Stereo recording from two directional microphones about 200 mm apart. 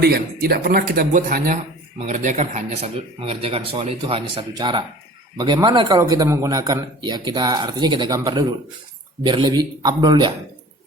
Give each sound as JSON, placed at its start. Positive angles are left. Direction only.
{"t": 0.0, "sound": "a man's voice", "side_deg": -50}